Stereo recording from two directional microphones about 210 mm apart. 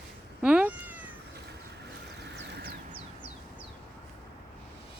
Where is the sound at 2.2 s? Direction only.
50° right (ahead or behind).